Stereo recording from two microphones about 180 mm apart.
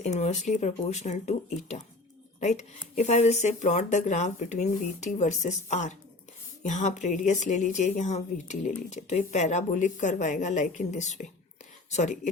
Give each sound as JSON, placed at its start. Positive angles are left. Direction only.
{"t": 0.0, "sound": "a woman's voice", "side_deg": 40}